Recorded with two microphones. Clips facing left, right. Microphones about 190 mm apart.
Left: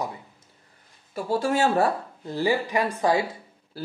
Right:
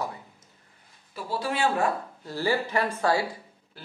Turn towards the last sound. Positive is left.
turn(degrees=15)  # may be behind; listen again after turning